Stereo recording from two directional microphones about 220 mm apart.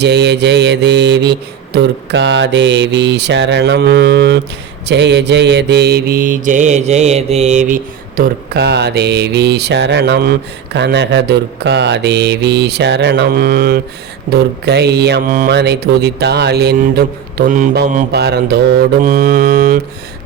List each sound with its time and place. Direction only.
0.0 s mantra: 50° right (ahead or behind)